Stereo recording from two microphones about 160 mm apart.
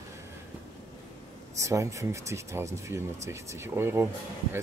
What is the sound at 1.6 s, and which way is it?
Speech, 20° right (ahead or behind).